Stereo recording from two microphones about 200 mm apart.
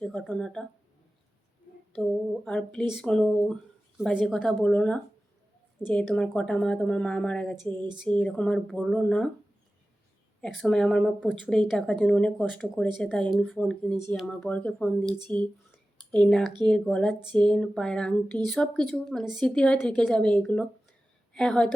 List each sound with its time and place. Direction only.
0.0 s speech: 5° left (ahead or behind)
2.0 s speech: 5° left (ahead or behind)
7.5 s speech: 20° right (ahead or behind)
7.9 s speech: centre (ahead or behind)
10.4 s speech: 5° left (ahead or behind)
16.1 s speech: 5° left (ahead or behind)